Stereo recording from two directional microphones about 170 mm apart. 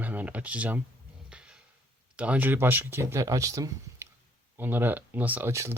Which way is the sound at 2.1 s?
10° right (ahead or behind).